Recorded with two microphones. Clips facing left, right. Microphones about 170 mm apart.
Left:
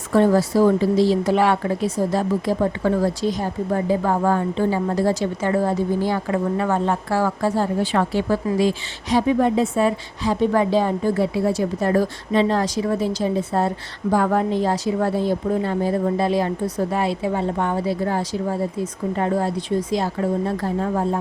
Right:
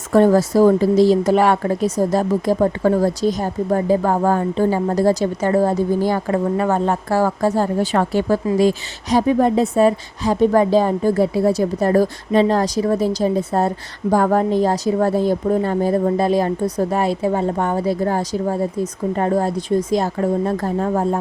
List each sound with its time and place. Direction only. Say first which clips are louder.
0.1 s a woman's voice: right 3 dB; 45° right (ahead or behind)